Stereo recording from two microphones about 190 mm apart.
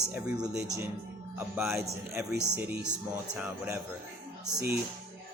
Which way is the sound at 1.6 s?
15° right (ahead or behind).